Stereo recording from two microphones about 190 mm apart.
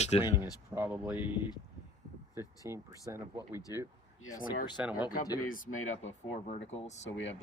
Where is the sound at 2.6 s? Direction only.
15° right (ahead or behind).